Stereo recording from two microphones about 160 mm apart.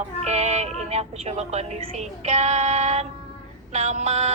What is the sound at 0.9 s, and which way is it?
Speech, 40° right (ahead or behind).